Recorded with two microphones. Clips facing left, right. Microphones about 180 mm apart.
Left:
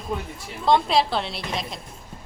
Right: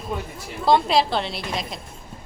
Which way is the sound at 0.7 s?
Centre (ahead or behind).